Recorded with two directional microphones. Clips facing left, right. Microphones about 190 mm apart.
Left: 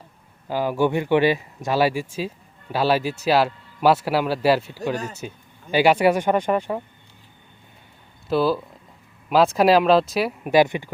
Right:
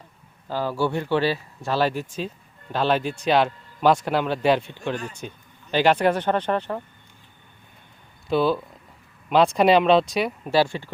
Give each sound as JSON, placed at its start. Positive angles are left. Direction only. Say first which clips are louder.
{"t": 0.4, "sound": "a man's voice", "louder": "left 3 dB", "side_deg": 15}
{"t": 8.3, "sound": "a man's voice", "louder": "left 1 dB", "side_deg": 0}
{"t": 10.4, "sound": "speech", "louder": "left 6 dB", "side_deg": 15}